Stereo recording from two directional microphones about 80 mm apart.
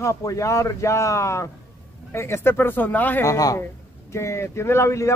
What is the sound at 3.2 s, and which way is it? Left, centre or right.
Speech, left.